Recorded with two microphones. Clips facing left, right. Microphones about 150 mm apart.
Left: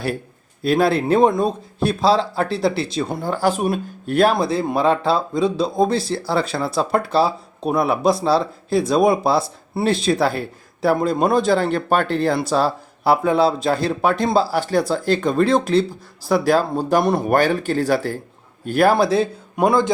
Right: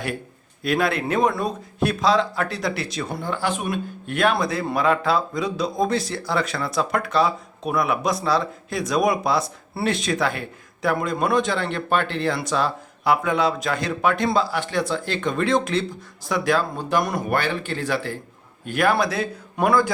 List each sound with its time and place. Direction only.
0.6 s speech: 30° left (ahead or behind)
17.2 s a man's voice: 40° left (ahead or behind); by 19.9 s 20° left (ahead or behind)